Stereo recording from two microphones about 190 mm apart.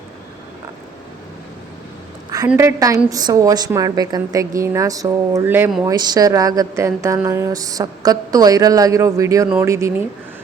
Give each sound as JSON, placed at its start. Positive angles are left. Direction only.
{"t": 2.5, "sound": "a woman's voice", "side_deg": -15}